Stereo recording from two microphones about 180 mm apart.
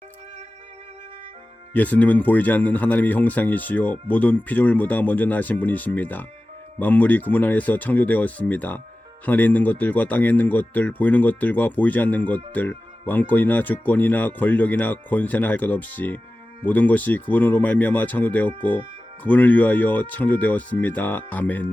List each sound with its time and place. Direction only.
1.7 s speech: 10° left (ahead or behind)